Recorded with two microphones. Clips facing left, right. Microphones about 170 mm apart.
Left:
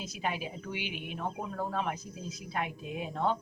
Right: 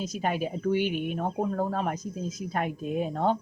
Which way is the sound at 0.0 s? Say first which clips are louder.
Right 7 dB; 45° right (ahead or behind).